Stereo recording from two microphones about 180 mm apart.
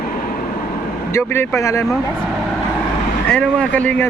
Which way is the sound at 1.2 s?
15° left (ahead or behind).